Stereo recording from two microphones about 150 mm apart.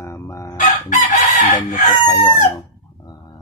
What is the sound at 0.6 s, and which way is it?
Chicken, 60° left (ahead or behind).